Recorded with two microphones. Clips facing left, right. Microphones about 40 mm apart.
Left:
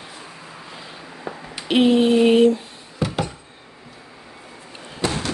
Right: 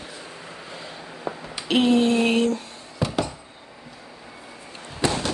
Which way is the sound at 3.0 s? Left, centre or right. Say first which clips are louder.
Left 1 dB; centre.